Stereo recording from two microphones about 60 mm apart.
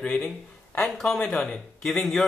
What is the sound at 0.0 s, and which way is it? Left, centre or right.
Speech, centre.